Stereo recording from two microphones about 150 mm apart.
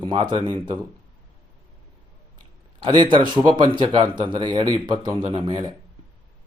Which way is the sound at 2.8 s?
30° right (ahead or behind).